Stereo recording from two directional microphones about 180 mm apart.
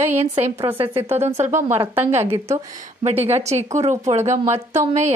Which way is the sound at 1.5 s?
15° right (ahead or behind).